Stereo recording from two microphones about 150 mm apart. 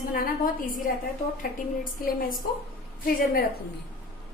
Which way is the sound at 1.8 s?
70° left (ahead or behind).